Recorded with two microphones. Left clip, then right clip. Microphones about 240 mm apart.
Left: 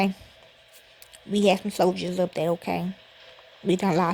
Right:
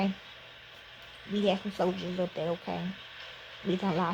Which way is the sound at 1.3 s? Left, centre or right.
Left.